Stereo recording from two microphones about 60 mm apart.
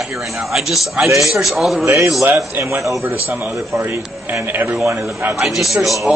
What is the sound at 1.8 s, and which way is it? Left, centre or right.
A man's voice, right.